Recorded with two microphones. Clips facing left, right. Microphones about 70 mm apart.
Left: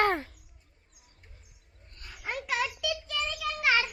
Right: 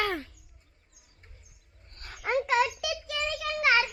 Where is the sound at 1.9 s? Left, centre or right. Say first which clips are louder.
Right 3 dB; right.